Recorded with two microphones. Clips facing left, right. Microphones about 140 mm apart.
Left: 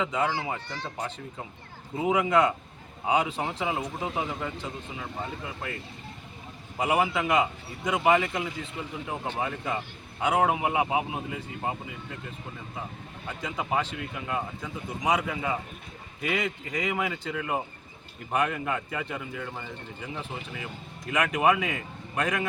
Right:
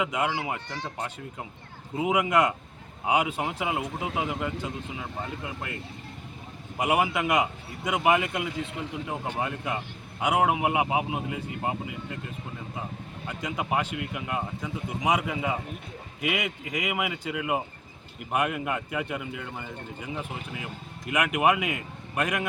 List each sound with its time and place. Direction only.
0.0 s speech: 15° right (ahead or behind)
2.0 s speech: 15° right (ahead or behind)
6.8 s speech: 10° right (ahead or behind)
13.4 s speech: 10° right (ahead or behind)
21.1 s speech: 15° right (ahead or behind)